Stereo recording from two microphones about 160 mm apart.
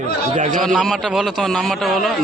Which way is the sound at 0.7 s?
Centre (ahead or behind).